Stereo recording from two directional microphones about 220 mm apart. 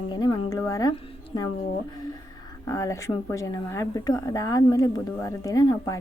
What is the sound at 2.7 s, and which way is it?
A woman's voice, 15° left (ahead or behind).